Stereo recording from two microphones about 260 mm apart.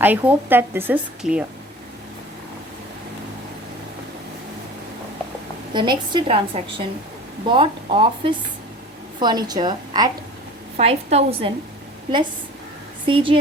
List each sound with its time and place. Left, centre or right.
0.0 s a woman's voice: centre
5.7 s a woman's voice: centre
13.1 s a woman's voice: centre